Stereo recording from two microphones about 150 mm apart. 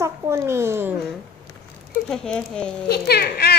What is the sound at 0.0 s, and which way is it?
Babbling, 15° right (ahead or behind).